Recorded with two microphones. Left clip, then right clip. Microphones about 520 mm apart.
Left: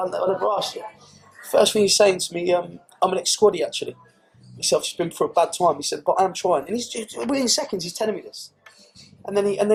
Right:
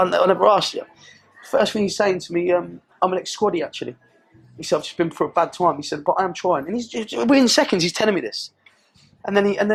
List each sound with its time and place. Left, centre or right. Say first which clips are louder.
0.0 s speech: right 7 dB; right
1.5 s speech: left 2 dB; right